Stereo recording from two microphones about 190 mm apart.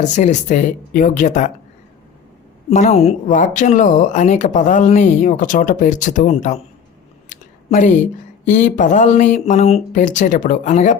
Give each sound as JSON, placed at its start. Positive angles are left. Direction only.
{"t": 0.0, "sound": "speech", "side_deg": 40}
{"t": 2.6, "sound": "speech", "side_deg": 35}
{"t": 7.3, "sound": "a sound", "side_deg": 40}
{"t": 8.4, "sound": "speech", "side_deg": 40}